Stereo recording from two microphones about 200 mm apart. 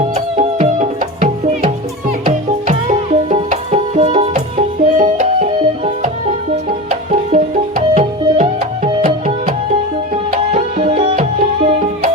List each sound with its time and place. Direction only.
0.1 s music: 35° right (ahead or behind)